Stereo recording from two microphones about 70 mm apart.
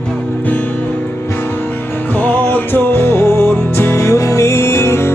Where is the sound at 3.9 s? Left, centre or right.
Left.